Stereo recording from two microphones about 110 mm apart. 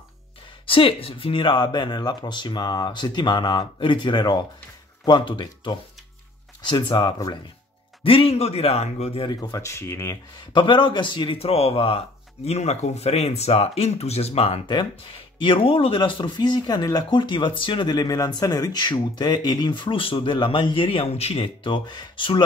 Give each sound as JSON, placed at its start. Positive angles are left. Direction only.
{"t": 0.7, "sound": "speech", "side_deg": 55}
{"t": 8.0, "sound": "speech", "side_deg": 55}
{"t": 9.3, "sound": "speech", "side_deg": 35}
{"t": 10.5, "sound": "speech", "side_deg": 50}
{"t": 12.4, "sound": "speech", "side_deg": 85}
{"t": 15.4, "sound": "speech", "side_deg": 55}
{"t": 21.6, "sound": "speech", "side_deg": 45}